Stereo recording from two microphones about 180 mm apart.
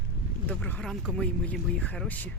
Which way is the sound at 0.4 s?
10° left (ahead or behind).